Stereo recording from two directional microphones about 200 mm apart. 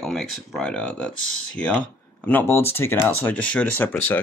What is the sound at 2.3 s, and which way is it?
Speech, 10° left (ahead or behind).